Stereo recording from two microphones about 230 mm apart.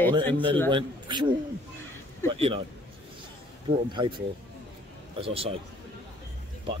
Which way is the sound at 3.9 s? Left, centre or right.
Centre.